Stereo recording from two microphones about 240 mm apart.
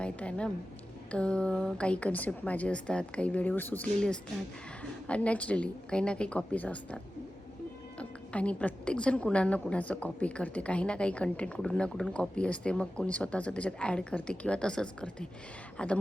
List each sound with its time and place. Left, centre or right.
0.0 s a woman's voice: centre